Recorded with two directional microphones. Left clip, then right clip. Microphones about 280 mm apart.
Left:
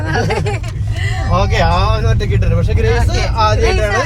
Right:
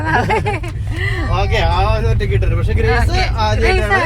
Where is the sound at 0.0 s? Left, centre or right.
Right.